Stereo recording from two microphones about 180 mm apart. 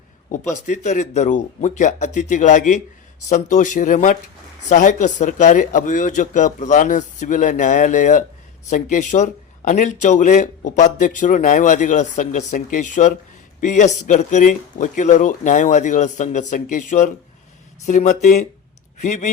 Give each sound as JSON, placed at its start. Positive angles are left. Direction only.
{"t": 0.3, "sound": "speech", "side_deg": 45}